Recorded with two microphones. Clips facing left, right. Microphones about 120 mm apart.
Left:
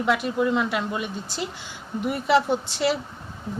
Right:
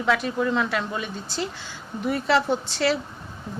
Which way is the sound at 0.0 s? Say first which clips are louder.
Left 1 dB; 10° left (ahead or behind).